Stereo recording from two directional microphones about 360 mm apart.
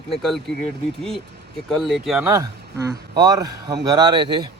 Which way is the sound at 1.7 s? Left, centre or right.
Centre.